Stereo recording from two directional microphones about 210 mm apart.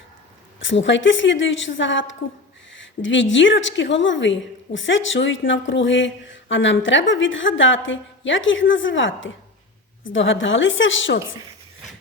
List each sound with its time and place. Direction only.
0.6 s a woman's voice: 60° left (ahead or behind)